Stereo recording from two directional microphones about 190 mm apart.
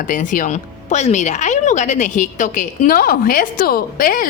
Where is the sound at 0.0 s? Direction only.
45° left (ahead or behind).